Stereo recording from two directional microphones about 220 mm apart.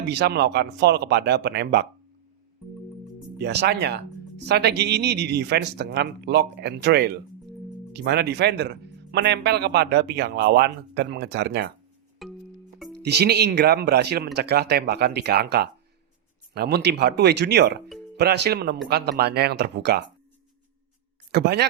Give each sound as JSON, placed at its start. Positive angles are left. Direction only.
{"t": 0.1, "sound": "speech", "side_deg": -50}
{"t": 3.3, "sound": "speech", "side_deg": -50}
{"t": 12.2, "sound": "music", "side_deg": 0}
{"t": 13.0, "sound": "speech", "side_deg": -50}
{"t": 21.3, "sound": "speech", "side_deg": -50}